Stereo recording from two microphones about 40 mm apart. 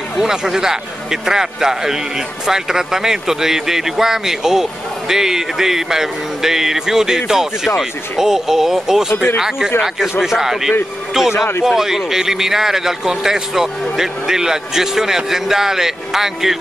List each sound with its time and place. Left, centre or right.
0.2 s speech: centre
9.1 s speech: left
10.2 s speech: centre